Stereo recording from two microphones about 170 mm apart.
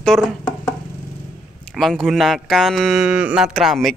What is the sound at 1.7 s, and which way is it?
A man's voice, centre (ahead or behind).